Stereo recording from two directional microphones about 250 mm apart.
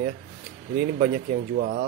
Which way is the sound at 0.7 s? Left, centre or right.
Right.